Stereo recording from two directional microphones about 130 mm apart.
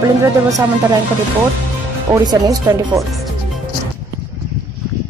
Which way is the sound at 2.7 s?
25° right (ahead or behind).